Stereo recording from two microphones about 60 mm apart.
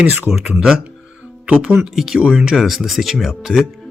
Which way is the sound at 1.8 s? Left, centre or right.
Centre.